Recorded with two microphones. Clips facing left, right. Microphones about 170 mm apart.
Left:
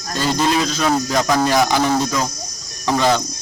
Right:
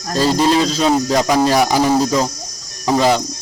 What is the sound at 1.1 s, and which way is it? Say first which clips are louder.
Speech: right 1 dB; 15° right (ahead or behind).